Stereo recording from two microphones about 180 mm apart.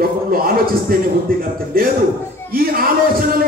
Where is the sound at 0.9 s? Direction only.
55° right (ahead or behind).